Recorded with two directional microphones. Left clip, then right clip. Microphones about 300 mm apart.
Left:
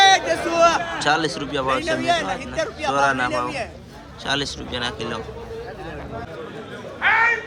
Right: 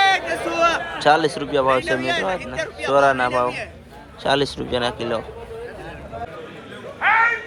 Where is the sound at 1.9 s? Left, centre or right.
Left.